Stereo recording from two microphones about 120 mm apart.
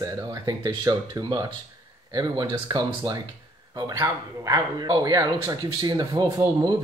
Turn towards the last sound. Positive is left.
turn(degrees=-30)  # may be behind; listen again after turning